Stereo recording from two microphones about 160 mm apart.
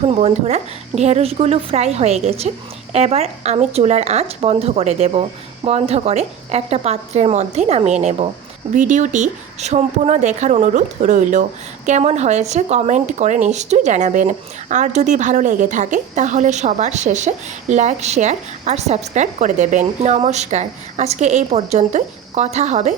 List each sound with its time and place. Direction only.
0.0 s a woman's voice: 40° right (ahead or behind)